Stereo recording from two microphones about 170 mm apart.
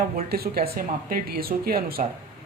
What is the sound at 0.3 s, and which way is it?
A woman's voice, 65° right (ahead or behind).